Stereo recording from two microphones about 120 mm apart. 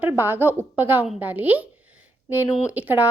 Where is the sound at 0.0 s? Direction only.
15° right (ahead or behind).